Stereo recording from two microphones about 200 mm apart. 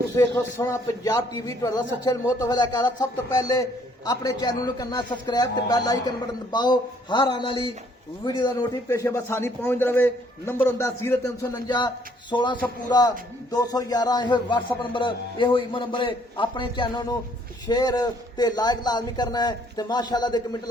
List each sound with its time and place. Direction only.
0.2 s a man's voice: 15° left (ahead or behind)